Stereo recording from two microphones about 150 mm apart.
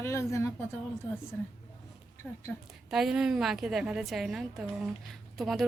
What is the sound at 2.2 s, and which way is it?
A woman's voice, 5° left (ahead or behind).